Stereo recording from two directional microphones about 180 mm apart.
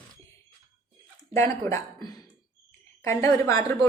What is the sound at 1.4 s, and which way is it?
A woman's voice, 15° left (ahead or behind).